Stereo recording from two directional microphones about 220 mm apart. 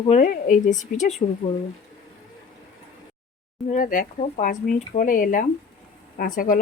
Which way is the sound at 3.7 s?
35° left (ahead or behind).